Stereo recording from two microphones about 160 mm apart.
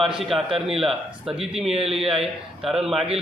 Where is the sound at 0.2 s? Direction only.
Centre (ahead or behind).